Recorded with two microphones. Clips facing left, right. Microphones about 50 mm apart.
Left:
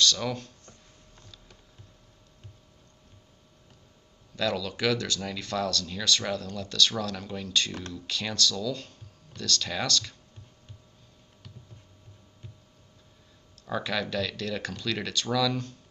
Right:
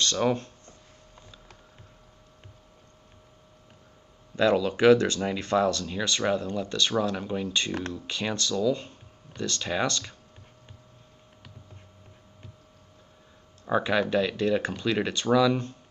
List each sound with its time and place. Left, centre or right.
0.0 s a sound: right
4.4 s speech: right
13.7 s speech: right